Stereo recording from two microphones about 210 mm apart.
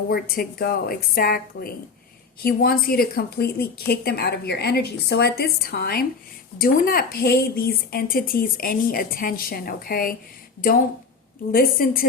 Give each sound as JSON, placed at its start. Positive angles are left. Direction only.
{"t": 0.1, "sound": "a woman's voice", "side_deg": 45}
{"t": 11.5, "sound": "a woman's voice", "side_deg": 45}